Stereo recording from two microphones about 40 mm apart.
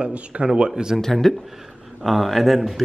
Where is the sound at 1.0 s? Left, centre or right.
Centre.